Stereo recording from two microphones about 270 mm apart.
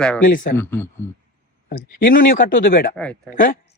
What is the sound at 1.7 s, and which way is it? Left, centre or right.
A man's voice, left.